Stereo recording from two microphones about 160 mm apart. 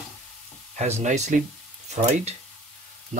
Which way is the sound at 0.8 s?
45° right (ahead or behind).